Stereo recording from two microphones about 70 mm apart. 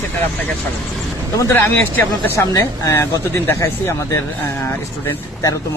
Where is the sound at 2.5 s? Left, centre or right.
Left.